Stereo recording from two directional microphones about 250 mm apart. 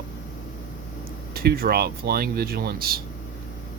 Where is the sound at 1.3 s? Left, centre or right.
Right.